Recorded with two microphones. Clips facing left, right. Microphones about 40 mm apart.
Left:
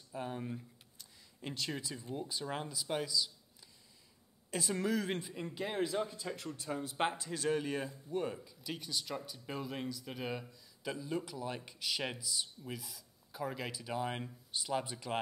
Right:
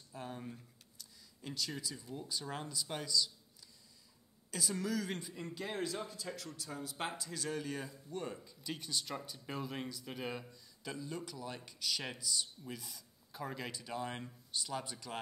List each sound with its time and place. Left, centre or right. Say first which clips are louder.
0.1 s a man's voice: left 5 dB; centre
0.9 s speech: left 1 dB; left; by 3.3 s centre
4.5 s a man's voice: left 3 dB; left
8.5 s speech: left 1 dB; centre
10.8 s speech: left 4 dB; centre
12.8 s speech: even; centre; by 15.1 s left